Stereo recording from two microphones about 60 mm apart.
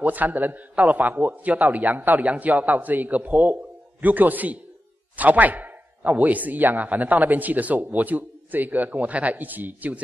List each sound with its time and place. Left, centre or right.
0.0 s speech: right